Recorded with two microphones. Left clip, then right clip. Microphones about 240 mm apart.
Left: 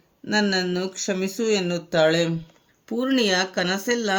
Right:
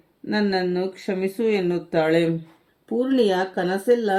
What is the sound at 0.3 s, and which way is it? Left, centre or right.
Speech, left.